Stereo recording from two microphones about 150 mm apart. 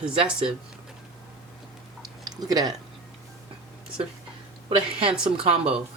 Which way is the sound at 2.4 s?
25° right (ahead or behind).